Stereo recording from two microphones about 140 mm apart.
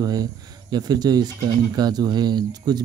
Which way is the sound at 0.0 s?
25° right (ahead or behind).